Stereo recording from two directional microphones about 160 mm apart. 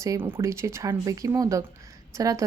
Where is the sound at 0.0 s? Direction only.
15° right (ahead or behind).